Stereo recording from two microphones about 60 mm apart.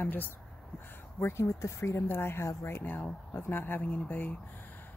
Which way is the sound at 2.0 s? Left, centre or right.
Left.